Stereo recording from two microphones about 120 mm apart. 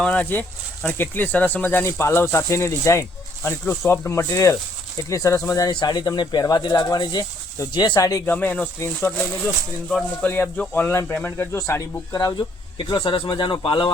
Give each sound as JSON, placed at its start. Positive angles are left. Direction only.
{"t": 0.0, "sound": "speech", "side_deg": 10}
{"t": 8.3, "sound": "speech", "side_deg": 15}